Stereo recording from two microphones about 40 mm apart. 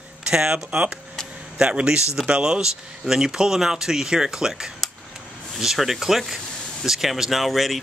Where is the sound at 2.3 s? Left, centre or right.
Right.